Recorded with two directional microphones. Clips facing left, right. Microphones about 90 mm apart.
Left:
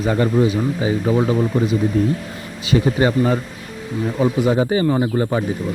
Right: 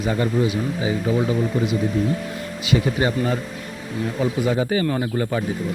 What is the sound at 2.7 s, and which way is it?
Speech, 30° left (ahead or behind).